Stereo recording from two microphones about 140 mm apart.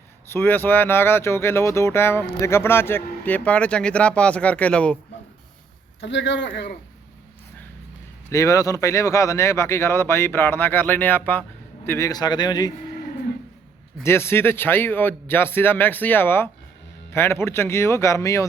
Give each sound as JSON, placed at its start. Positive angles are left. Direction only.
{"t": 0.3, "sound": "speech", "side_deg": 15}
{"t": 8.3, "sound": "speech", "side_deg": 20}
{"t": 14.0, "sound": "speech", "side_deg": 15}